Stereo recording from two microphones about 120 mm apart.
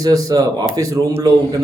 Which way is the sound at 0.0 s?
30° right (ahead or behind).